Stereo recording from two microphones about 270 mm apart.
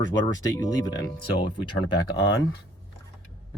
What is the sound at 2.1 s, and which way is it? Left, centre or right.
Speech, left.